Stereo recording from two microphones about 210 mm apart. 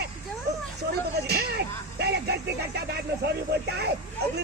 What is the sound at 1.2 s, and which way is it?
Speech, 50° right (ahead or behind).